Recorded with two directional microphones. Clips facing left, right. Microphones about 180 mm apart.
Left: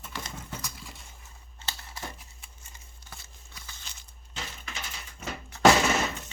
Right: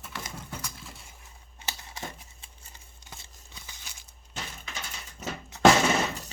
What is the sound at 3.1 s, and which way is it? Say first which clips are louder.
Crumpling: right 1 dB; 15° right (ahead or behind).